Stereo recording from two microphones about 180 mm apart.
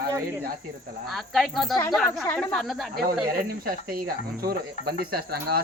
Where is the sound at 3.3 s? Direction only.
55° right (ahead or behind).